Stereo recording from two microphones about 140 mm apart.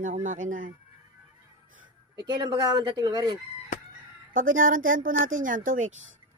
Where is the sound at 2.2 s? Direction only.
25° right (ahead or behind).